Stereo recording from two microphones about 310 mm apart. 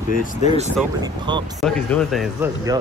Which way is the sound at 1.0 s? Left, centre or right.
Centre.